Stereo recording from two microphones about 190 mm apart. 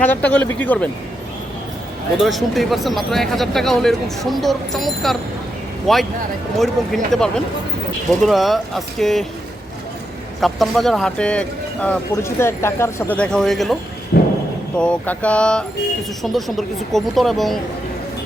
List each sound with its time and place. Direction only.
0.0 s speech: 10° left (ahead or behind)
2.1 s speech: centre (ahead or behind)
10.4 s speech: centre (ahead or behind)
14.1 s a sound: 60° left (ahead or behind)
14.8 s speech: 5° left (ahead or behind)